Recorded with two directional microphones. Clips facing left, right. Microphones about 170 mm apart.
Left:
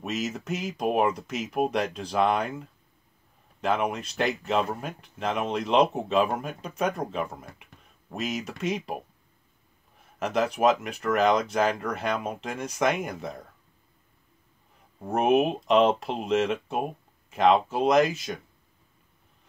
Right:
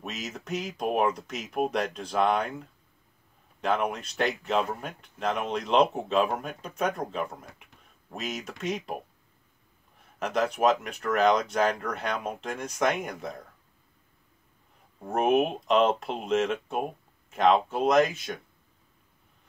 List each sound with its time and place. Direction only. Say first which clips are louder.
0.0 s speech: left 6 dB; 5° left (ahead or behind)
3.6 s speech: left 1 dB; centre (ahead or behind)
10.1 s speech: left 1 dB; centre (ahead or behind)
15.0 s speech: left 2 dB; centre (ahead or behind)